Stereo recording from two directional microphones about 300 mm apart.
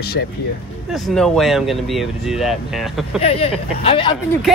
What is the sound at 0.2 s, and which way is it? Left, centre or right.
Speech, left.